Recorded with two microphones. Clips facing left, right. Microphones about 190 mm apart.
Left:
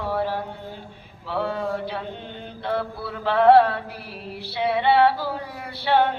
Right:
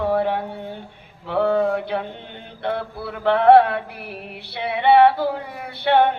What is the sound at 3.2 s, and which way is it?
Mantra, 60° right (ahead or behind).